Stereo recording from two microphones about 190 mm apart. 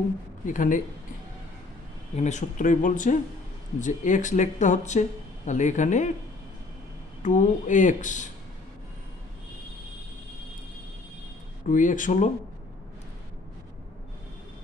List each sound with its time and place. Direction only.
0.5 s speech: 45° left (ahead or behind)
2.1 s speech: 40° left (ahead or behind)
7.2 s speech: 40° left (ahead or behind)
11.6 s speech: 45° left (ahead or behind)